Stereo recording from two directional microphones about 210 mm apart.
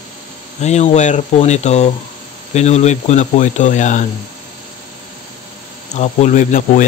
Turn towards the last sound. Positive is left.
turn(degrees=40)  # may be behind; listen again after turning